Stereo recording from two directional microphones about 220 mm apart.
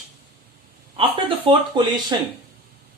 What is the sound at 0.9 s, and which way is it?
Speech, 25° right (ahead or behind).